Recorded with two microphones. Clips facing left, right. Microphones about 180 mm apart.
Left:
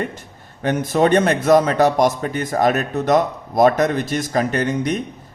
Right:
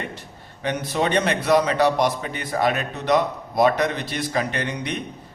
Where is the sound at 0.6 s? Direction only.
45° left (ahead or behind).